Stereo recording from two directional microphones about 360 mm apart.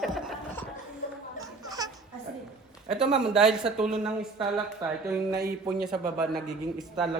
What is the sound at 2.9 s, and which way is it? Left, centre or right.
Speech, centre.